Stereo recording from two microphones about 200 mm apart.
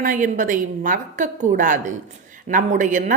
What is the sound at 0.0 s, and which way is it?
A woman's voice, 40° right (ahead or behind).